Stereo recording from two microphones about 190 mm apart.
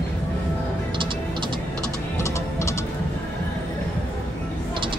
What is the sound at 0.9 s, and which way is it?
Music, 25° right (ahead or behind).